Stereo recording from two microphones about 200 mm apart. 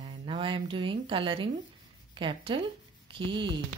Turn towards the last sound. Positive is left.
turn(degrees=-25)  # may be behind; listen again after turning